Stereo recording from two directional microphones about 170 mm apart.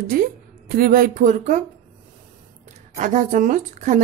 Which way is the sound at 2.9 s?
45° right (ahead or behind).